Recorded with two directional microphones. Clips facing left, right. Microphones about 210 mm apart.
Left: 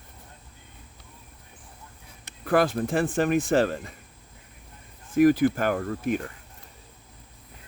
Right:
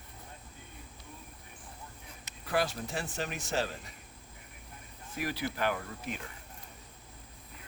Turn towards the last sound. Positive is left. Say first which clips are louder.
# left 10 dB
turn(degrees=50)  # may be behind; listen again after turning